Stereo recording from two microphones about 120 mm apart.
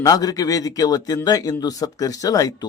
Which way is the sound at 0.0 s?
30° left (ahead or behind).